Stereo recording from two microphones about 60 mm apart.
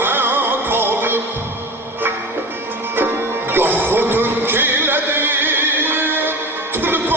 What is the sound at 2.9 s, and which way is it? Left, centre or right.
Music, right.